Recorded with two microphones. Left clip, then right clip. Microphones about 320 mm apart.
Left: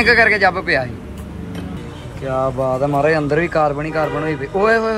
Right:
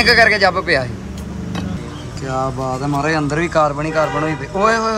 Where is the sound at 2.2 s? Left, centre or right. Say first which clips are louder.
Left 3 dB; centre.